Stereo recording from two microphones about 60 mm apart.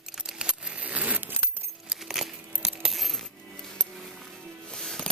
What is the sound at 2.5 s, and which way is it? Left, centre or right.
Coin, right.